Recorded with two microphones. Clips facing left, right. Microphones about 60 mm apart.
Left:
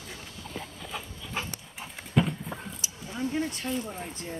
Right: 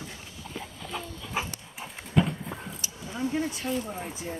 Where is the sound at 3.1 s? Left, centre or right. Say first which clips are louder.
Right 1 dB; centre.